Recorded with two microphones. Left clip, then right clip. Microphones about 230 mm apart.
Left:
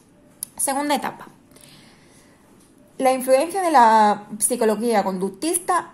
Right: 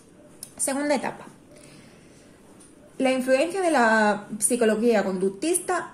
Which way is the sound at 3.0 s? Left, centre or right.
Left.